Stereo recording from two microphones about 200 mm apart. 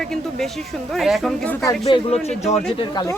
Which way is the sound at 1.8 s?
25° left (ahead or behind).